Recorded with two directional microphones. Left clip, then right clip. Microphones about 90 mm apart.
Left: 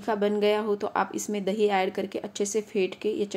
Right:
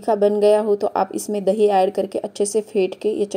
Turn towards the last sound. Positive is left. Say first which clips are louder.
# right 7 dB
turn(degrees=-25)  # may be behind; listen again after turning